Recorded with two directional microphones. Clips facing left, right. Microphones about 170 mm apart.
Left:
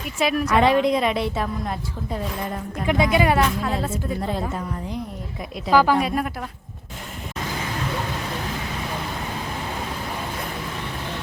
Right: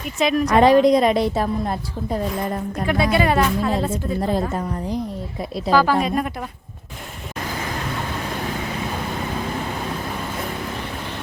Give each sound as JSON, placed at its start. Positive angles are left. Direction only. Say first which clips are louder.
{"t": 0.2, "sound": "speech", "louder": "right 3 dB", "side_deg": 5}
{"t": 0.4, "sound": "speech", "louder": "right 5 dB", "side_deg": -40}
{"t": 2.8, "sound": "a woman's voice", "louder": "even", "side_deg": 15}
{"t": 4.2, "sound": "speech", "louder": "right 4 dB", "side_deg": -40}
{"t": 5.7, "sound": "speech", "louder": "even", "side_deg": 15}